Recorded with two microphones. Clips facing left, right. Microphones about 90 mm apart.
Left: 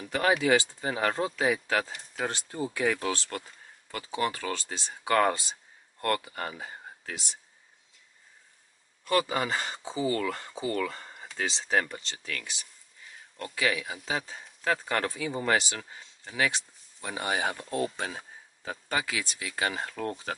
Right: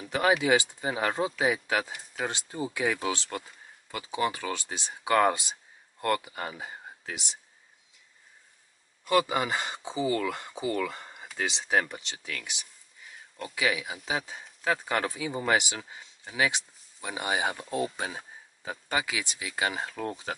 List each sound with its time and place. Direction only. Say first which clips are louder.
0.0 s a sound: right 1 dB; 15° right (ahead or behind)
0.4 s speech: even; 15° right (ahead or behind)
9.0 s speech: right 2 dB; 10° right (ahead or behind)